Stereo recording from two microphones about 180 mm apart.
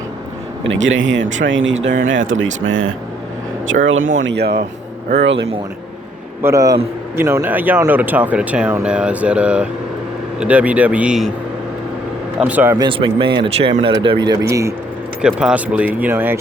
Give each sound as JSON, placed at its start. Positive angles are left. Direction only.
{"t": 0.6, "sound": "speech", "side_deg": -90}
{"t": 4.2, "sound": "speech", "side_deg": -75}
{"t": 5.0, "sound": "speech", "side_deg": -80}
{"t": 6.4, "sound": "speech", "side_deg": -15}
{"t": 12.4, "sound": "speech", "side_deg": -10}
{"t": 12.8, "sound": "speech", "side_deg": -30}
{"t": 15.2, "sound": "speech", "side_deg": -5}